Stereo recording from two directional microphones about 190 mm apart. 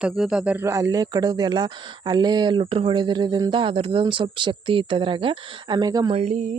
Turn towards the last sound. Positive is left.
turn(degrees=-35)  # may be behind; listen again after turning